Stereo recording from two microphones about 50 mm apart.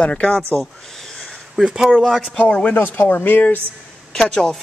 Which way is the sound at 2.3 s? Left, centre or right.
Left.